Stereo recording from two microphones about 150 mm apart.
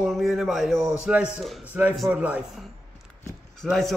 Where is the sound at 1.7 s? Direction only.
10° right (ahead or behind).